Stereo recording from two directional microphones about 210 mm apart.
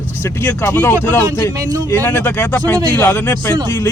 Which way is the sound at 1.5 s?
15° right (ahead or behind).